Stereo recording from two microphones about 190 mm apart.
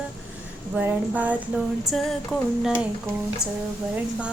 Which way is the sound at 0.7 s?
10° right (ahead or behind).